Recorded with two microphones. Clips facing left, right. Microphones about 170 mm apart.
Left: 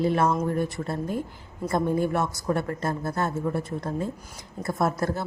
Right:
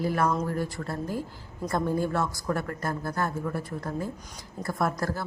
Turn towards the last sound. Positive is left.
turn(degrees=20)  # may be behind; listen again after turning